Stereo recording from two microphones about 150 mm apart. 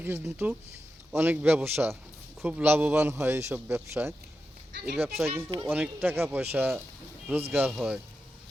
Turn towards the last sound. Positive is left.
turn(degrees=-5)  # may be behind; listen again after turning